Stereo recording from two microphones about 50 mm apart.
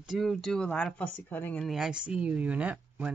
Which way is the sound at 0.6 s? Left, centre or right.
Centre.